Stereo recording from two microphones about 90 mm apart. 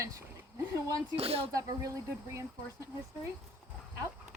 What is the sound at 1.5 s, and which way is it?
Speech, 40° right (ahead or behind).